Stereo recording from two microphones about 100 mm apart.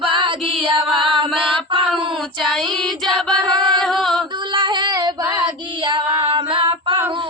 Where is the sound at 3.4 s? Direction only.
50° right (ahead or behind).